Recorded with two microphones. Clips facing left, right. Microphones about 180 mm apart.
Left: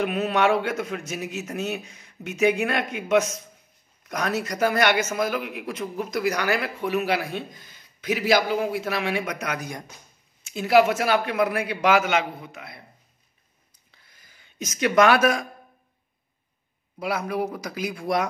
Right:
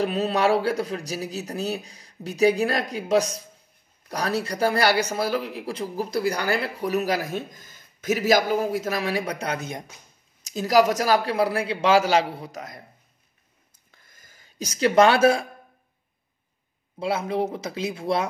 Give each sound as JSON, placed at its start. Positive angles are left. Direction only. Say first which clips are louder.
{"t": 0.0, "sound": "a man's voice", "louder": "even", "side_deg": -35}
{"t": 10.4, "sound": "a man's voice", "louder": "left 1 dB", "side_deg": -40}
{"t": 13.9, "sound": "a sound", "louder": "right 2 dB", "side_deg": -45}
{"t": 17.0, "sound": "speech", "louder": "right 2 dB", "side_deg": -25}